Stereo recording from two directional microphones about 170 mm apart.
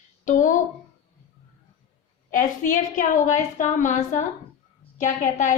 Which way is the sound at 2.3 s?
50° left (ahead or behind).